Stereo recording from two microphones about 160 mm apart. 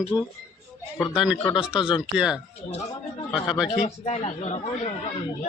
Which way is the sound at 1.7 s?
30° left (ahead or behind).